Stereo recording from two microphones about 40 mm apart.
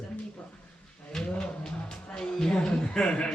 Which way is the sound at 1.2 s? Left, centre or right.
Centre.